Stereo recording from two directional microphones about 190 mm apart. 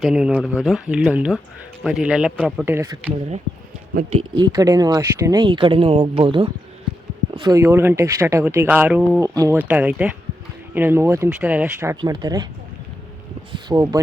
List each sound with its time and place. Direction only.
0.0 s speech: 5° right (ahead or behind)
2.6 s speech: 15° right (ahead or behind)
3.9 s speech: 35° right (ahead or behind)
4.4 s speech: 20° right (ahead or behind)
13.5 s speech: 25° right (ahead or behind)